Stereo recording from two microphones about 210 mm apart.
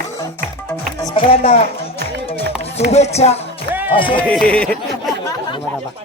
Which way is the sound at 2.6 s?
30° left (ahead or behind).